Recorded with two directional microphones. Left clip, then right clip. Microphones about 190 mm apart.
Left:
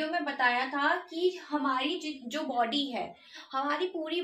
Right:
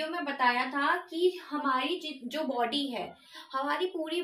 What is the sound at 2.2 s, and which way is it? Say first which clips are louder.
A woman's voice: left 1 dB; 30° left (ahead or behind).